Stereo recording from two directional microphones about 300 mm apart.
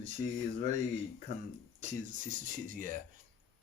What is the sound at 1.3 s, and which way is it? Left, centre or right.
Speech, right.